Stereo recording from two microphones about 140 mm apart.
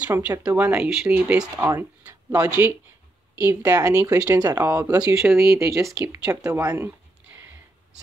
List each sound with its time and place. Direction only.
0.3 s speech: 25° right (ahead or behind)
0.7 s speech: 5° right (ahead or behind)